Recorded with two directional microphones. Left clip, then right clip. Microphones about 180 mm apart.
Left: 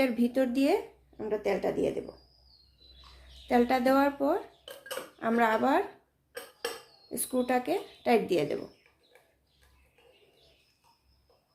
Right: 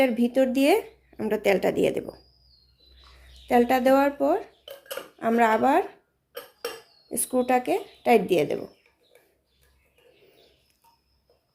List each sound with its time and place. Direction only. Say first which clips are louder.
0.0 s speech: right 6 dB; 25° right (ahead or behind)
1.1 s speech: right 7 dB; 50° right (ahead or behind)
3.5 s speech: right 5 dB; 30° right (ahead or behind)
7.1 s speech: right 6 dB; 25° right (ahead or behind)